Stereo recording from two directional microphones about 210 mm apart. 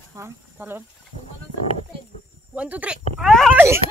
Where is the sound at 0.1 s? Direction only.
10° right (ahead or behind).